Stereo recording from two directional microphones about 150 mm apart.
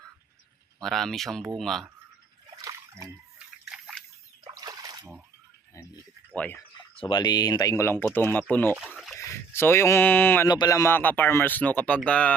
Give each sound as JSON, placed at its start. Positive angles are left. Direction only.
{"t": 0.8, "sound": "speech", "side_deg": 0}
{"t": 2.6, "sound": "splash", "side_deg": -20}
{"t": 3.3, "sound": "drip", "side_deg": -5}
{"t": 4.4, "sound": "splash", "side_deg": -25}
{"t": 6.3, "sound": "speech", "side_deg": 10}
{"t": 6.9, "sound": "speech", "side_deg": 35}
{"t": 8.7, "sound": "a sound", "side_deg": -10}
{"t": 9.1, "sound": "speech", "side_deg": 15}
{"t": 10.5, "sound": "speech", "side_deg": 25}